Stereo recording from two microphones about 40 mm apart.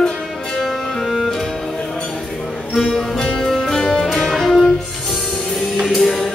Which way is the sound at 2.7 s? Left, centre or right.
Centre.